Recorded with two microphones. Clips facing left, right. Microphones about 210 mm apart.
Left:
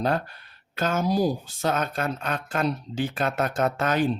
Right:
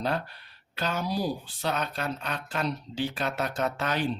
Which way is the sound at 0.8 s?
45° left (ahead or behind).